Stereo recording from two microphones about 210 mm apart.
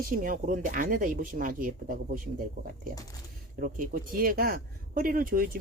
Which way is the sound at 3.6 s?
40° right (ahead or behind).